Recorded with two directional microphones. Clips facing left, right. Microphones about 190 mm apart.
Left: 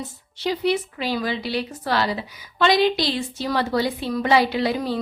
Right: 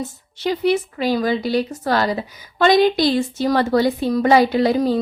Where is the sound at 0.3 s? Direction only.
50° right (ahead or behind).